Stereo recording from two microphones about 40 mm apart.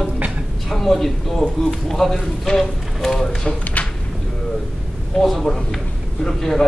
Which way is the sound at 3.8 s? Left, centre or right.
Left.